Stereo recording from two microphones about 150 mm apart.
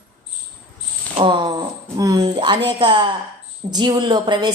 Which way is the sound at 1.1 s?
35° right (ahead or behind).